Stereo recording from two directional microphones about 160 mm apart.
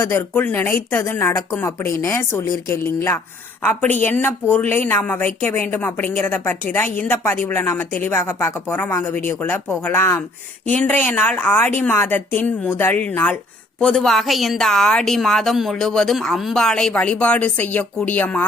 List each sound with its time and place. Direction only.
0.0 s a woman's voice: 15° left (ahead or behind)